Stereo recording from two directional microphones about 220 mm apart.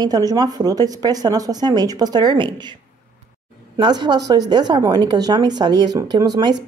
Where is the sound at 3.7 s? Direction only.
20° right (ahead or behind).